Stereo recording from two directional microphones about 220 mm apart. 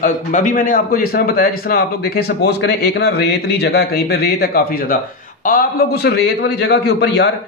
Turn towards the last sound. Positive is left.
turn(degrees=50)  # may be behind; listen again after turning